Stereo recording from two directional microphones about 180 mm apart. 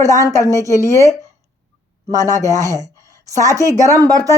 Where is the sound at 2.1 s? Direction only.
20° right (ahead or behind).